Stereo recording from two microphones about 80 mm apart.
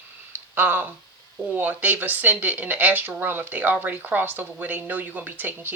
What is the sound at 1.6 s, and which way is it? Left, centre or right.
Speech, right.